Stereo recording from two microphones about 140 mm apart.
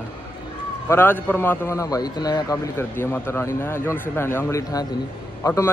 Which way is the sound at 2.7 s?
15° left (ahead or behind).